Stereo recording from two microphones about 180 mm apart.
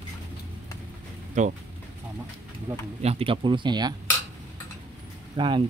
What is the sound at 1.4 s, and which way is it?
Speech, 45° right (ahead or behind).